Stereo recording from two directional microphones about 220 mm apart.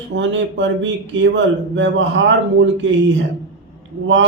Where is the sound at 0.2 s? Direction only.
60° right (ahead or behind).